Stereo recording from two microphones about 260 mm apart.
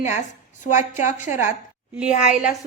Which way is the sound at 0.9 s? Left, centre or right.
Left.